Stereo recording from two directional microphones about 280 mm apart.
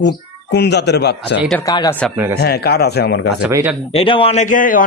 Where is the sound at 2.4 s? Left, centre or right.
Left.